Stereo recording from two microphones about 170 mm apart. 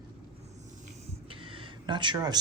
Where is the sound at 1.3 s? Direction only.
30° right (ahead or behind).